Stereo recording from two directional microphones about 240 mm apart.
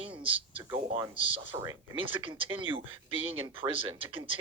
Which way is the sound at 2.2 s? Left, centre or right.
Right.